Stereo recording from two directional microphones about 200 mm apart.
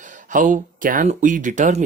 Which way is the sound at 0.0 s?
40° right (ahead or behind).